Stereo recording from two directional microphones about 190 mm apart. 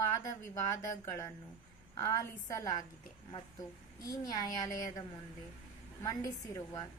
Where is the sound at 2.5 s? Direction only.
15° left (ahead or behind).